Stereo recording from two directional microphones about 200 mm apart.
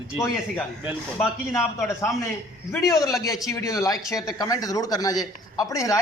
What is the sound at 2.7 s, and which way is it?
A man's voice, 15° left (ahead or behind).